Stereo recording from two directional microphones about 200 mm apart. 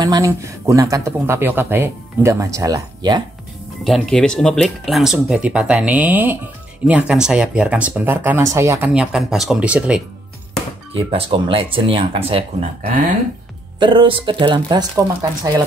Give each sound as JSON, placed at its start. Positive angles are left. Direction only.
{"t": 0.0, "sound": "speech", "side_deg": -20}
{"t": 3.8, "sound": "speech", "side_deg": 0}
{"t": 10.9, "sound": "speech", "side_deg": -30}